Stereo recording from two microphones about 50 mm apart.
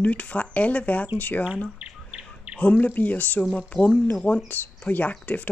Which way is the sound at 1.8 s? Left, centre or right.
Right.